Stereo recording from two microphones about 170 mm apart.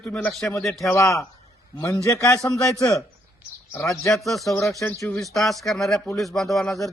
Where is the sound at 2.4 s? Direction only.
15° left (ahead or behind).